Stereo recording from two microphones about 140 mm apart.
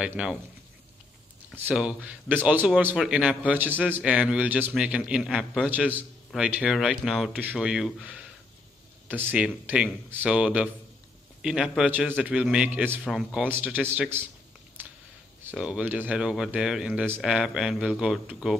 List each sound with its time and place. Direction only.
0.0 s a man's voice: 5° right (ahead or behind)
1.7 s a man's voice: 5° right (ahead or behind)
5.7 s a man's voice: 10° right (ahead or behind)
13.0 s a man's voice: centre (ahead or behind)
15.5 s speech: 5° right (ahead or behind)